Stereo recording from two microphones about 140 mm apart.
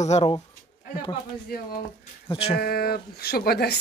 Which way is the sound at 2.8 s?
90° left.